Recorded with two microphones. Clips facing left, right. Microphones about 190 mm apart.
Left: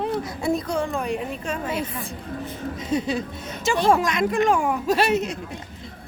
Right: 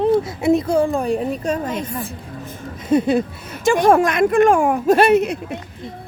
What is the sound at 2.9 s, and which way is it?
A woman's voice, 55° right (ahead or behind).